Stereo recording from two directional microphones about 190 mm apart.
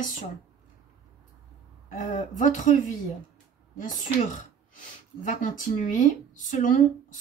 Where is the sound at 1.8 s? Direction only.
45° left (ahead or behind).